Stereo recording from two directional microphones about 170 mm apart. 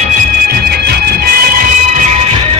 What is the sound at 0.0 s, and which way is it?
Music, 55° right (ahead or behind).